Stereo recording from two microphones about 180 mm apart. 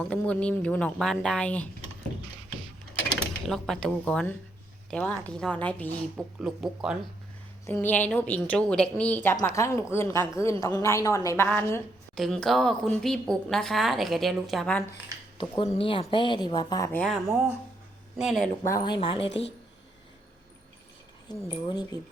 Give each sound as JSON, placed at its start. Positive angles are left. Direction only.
{"t": 0.0, "sound": "a woman's voice", "side_deg": 5}
{"t": 3.2, "sound": "a woman's voice", "side_deg": 0}
{"t": 6.4, "sound": "a woman's voice", "side_deg": -5}
{"t": 7.7, "sound": "a woman's voice", "side_deg": 10}
{"t": 11.4, "sound": "a woman's voice", "side_deg": 5}
{"t": 15.4, "sound": "speech", "side_deg": 30}
{"t": 17.0, "sound": "a woman's voice", "side_deg": 0}
{"t": 18.6, "sound": "speech", "side_deg": 20}
{"t": 21.3, "sound": "speech", "side_deg": 25}